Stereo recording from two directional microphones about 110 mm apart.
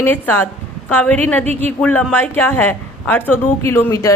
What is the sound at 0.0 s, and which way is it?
A woman's voice, 20° left (ahead or behind).